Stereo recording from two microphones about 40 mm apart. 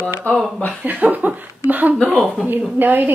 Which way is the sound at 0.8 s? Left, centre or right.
Right.